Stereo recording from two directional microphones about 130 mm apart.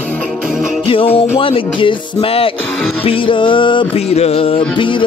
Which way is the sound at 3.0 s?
45° left (ahead or behind).